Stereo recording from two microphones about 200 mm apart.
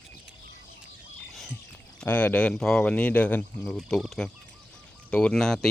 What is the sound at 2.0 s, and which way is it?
Speech, 10° left (ahead or behind).